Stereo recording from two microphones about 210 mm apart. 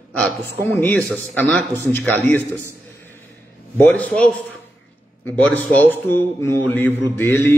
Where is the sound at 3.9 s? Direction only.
5° left (ahead or behind).